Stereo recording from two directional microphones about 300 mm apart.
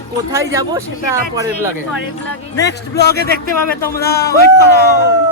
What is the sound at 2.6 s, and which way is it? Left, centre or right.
Speech, left.